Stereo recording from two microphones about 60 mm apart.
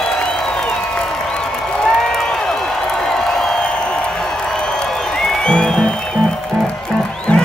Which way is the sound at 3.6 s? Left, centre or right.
Centre.